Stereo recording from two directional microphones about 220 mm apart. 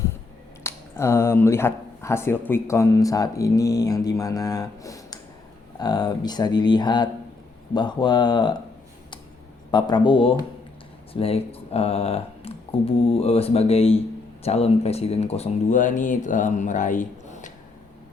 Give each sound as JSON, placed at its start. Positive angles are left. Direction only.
{"t": 0.6, "sound": "speech", "side_deg": 10}
{"t": 9.7, "sound": "speech", "side_deg": 20}